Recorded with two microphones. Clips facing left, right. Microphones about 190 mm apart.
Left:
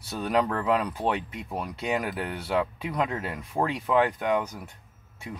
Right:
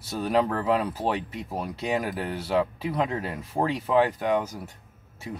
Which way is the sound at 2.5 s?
30° right (ahead or behind).